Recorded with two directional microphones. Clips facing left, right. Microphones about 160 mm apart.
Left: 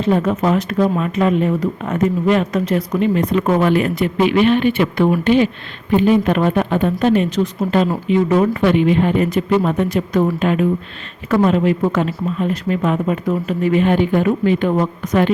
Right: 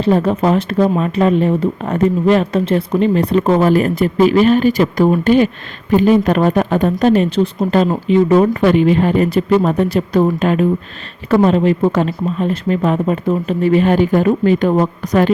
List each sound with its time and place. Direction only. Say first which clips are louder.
0.0 s speech: right 3 dB; 35° right (ahead or behind)